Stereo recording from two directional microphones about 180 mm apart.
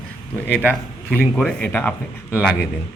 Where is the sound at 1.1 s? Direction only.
Centre (ahead or behind).